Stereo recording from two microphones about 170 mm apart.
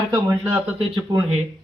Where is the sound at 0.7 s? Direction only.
30° right (ahead or behind).